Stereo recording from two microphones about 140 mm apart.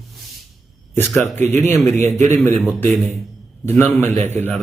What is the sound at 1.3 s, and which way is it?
Speech, 15° left (ahead or behind).